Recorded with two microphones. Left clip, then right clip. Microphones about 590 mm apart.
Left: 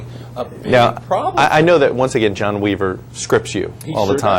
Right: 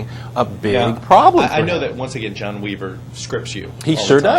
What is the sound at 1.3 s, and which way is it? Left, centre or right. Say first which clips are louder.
Speech: left 4 dB; left.